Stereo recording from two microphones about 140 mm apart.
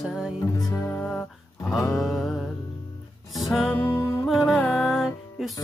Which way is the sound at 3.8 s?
30° left (ahead or behind).